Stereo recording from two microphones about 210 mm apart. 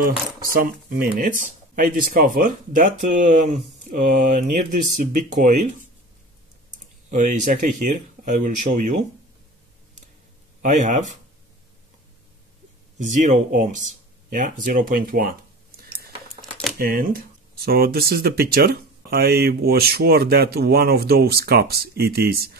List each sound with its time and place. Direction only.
0.4 s speech: 45° right (ahead or behind)
7.1 s speech: 35° right (ahead or behind)
10.6 s speech: 35° right (ahead or behind)
13.0 s speech: 35° right (ahead or behind)
14.3 s a sound: 40° right (ahead or behind)
16.3 s a sound: 5° left (ahead or behind)
16.7 s speech: 45° right (ahead or behind)